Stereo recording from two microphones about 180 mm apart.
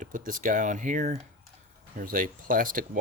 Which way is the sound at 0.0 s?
45° right (ahead or behind).